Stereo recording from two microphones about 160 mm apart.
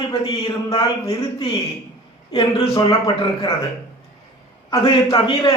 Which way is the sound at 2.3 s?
35° left (ahead or behind).